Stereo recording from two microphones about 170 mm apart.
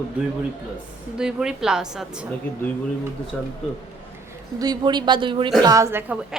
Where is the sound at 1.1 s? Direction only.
5° right (ahead or behind).